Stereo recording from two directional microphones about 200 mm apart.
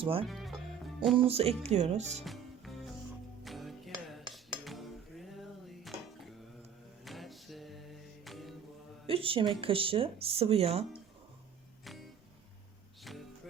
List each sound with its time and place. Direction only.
0.0 s speech: 25° right (ahead or behind)
0.3 s music: centre (ahead or behind)
1.2 s speech: 30° right (ahead or behind)
2.2 s music: centre (ahead or behind)
7.0 s music: centre (ahead or behind)
9.0 s speech: 25° right (ahead or behind)